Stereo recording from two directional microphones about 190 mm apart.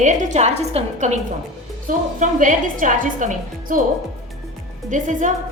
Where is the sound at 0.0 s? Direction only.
40° right (ahead or behind).